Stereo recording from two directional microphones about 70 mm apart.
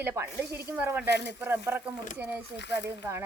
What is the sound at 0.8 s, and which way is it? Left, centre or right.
Speech, right.